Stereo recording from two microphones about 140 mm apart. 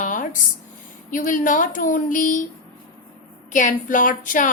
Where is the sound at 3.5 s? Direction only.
65° left (ahead or behind).